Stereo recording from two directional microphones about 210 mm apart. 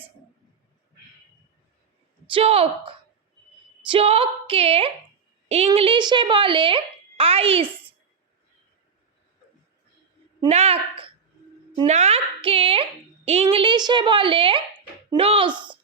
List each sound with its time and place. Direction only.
2.2 s a woman's voice: 25° right (ahead or behind)
10.5 s a woman's voice: 30° right (ahead or behind)